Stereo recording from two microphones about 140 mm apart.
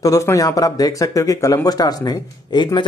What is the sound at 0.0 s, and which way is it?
Speech, 20° left (ahead or behind).